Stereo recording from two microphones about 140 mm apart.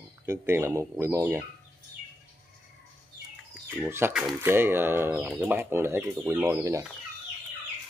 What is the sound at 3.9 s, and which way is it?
Speech, 15° right (ahead or behind).